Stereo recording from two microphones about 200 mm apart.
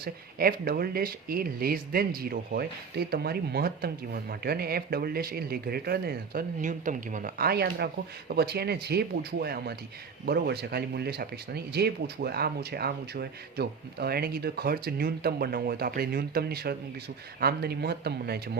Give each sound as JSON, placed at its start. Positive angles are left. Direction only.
{"t": 0.0, "sound": "speech", "side_deg": -50}